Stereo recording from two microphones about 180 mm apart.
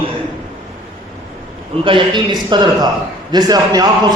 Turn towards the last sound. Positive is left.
turn(degrees=-20)  # may be behind; listen again after turning